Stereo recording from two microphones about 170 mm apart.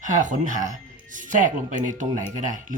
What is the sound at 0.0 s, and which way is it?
Speech, 50° right (ahead or behind).